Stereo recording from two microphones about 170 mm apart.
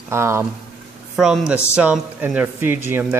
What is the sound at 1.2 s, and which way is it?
Speech, centre (ahead or behind).